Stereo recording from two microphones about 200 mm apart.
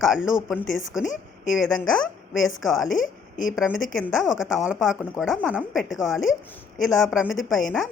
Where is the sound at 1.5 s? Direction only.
Centre (ahead or behind).